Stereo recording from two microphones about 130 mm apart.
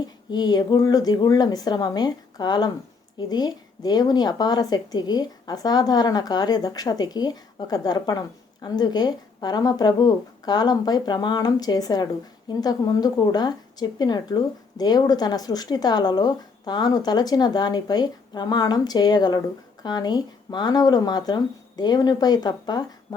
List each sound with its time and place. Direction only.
0.0 s speech: 30° left (ahead or behind)